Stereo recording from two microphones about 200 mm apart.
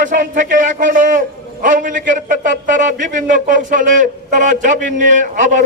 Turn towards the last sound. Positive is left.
turn(degrees=-40)  # may be behind; listen again after turning